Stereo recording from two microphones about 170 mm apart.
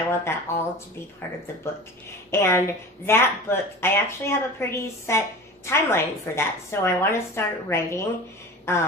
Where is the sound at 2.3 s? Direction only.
15° left (ahead or behind).